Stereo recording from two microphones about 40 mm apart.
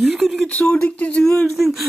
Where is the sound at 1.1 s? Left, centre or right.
Centre.